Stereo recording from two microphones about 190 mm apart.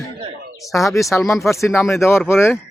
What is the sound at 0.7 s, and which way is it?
Speech, 15° left (ahead or behind).